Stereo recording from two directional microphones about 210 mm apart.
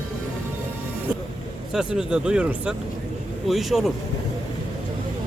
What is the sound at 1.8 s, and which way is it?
Speech, 5° right (ahead or behind).